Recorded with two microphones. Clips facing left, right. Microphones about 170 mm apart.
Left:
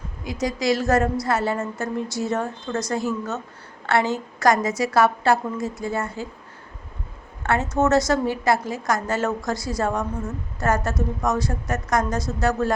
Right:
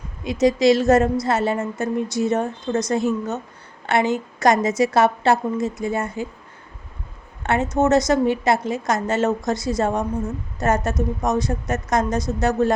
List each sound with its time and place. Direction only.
0.3 s a woman's voice: 25° right (ahead or behind)
7.4 s a woman's voice: 20° right (ahead or behind)